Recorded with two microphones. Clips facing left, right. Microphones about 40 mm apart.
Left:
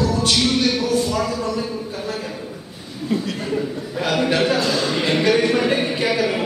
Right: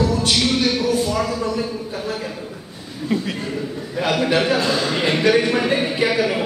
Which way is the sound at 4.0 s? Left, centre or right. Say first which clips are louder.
Right 1 dB; centre.